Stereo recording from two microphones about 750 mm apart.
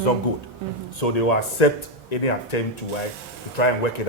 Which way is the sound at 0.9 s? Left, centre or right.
Left.